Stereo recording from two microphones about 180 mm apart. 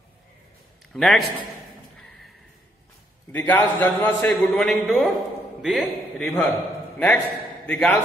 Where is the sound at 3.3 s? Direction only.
10° left (ahead or behind).